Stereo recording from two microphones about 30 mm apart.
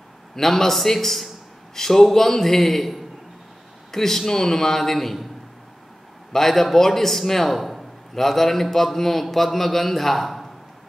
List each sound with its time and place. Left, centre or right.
0.4 s a man's voice: centre
6.3 s a man's voice: centre